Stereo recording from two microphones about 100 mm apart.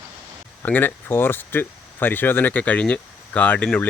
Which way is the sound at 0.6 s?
15° left (ahead or behind).